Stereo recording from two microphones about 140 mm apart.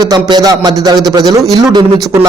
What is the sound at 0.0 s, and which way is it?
A man's voice, 30° right (ahead or behind).